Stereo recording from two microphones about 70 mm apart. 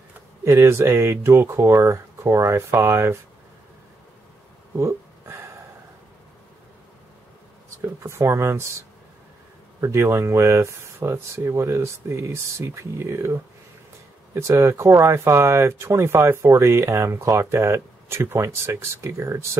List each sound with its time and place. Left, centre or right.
0.5 s speech: right
4.7 s a sound: right
8.0 s speech: right
9.8 s speech: right